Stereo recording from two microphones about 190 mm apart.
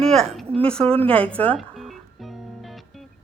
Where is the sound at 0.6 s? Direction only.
5° left (ahead or behind).